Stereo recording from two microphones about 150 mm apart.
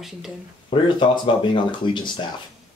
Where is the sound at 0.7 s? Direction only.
30° left (ahead or behind).